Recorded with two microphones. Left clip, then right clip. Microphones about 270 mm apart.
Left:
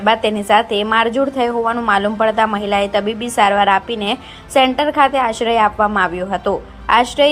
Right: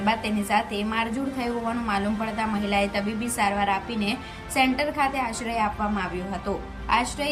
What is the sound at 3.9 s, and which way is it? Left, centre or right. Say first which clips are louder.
Speech: left 9 dB; centre.